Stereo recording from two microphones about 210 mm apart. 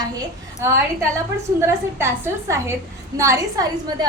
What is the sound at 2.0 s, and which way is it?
A woman's voice, 10° right (ahead or behind).